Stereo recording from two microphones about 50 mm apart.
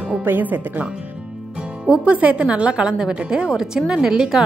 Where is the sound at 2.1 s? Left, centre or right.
Right.